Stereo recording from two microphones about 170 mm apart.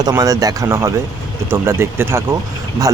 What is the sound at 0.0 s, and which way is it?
Speech, 20° right (ahead or behind).